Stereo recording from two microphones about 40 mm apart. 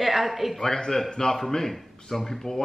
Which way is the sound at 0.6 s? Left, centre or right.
Centre.